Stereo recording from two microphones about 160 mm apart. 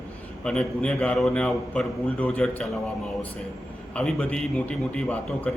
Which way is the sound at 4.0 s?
5° left (ahead or behind).